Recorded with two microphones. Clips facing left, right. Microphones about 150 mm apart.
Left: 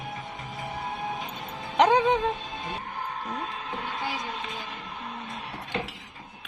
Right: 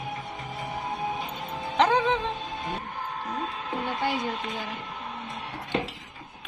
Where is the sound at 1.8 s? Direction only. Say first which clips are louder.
Left 2 dB; 15° left (ahead or behind).